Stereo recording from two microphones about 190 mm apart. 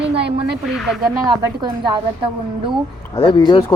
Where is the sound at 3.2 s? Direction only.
25° left (ahead or behind).